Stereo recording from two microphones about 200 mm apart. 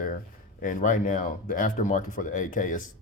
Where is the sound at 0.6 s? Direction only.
40° left (ahead or behind).